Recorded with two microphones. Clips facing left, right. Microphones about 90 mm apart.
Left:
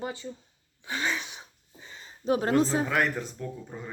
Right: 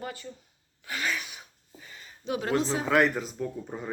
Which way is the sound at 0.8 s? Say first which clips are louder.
Left 1 dB; 25° left (ahead or behind).